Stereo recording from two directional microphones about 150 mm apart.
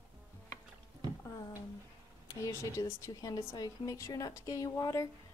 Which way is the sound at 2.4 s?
20° left (ahead or behind).